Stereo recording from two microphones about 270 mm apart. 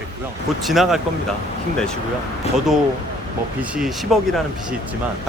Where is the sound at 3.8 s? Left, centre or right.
Centre.